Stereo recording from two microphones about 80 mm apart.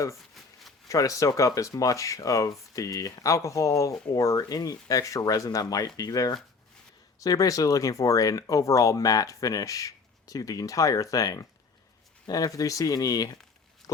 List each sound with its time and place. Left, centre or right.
0.9 s speech: left
13.8 s pig: left